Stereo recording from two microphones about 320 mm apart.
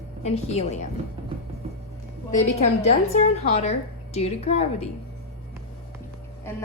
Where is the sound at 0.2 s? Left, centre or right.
Centre.